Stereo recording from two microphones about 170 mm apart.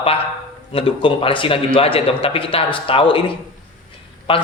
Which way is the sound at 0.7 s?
30° left (ahead or behind).